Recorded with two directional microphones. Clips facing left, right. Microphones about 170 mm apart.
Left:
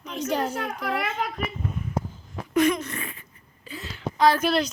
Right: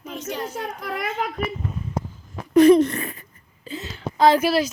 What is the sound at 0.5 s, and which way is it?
Speech, 65° left (ahead or behind).